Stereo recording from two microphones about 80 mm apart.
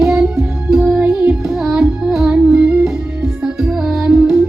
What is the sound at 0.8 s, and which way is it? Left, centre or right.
Music, centre.